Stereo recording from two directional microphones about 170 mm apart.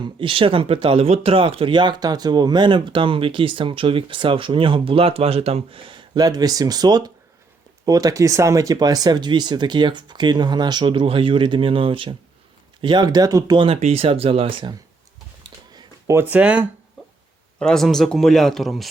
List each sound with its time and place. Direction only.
0.2 s speech: 30° right (ahead or behind)
13.7 s speech: 40° right (ahead or behind)
15.7 s a sound: 20° right (ahead or behind)
16.3 s speech: 10° right (ahead or behind)
17.0 s a sound: centre (ahead or behind)
17.6 s a man's voice: 5° left (ahead or behind)